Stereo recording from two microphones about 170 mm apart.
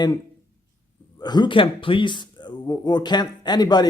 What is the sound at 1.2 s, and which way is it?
Speech, 25° left (ahead or behind).